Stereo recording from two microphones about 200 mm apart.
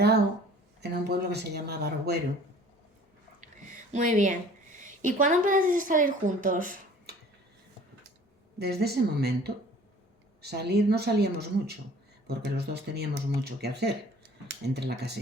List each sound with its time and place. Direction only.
0.8 s speech: 55° right (ahead or behind)
3.9 s a woman's voice: 40° right (ahead or behind)
8.5 s speech: 55° right (ahead or behind)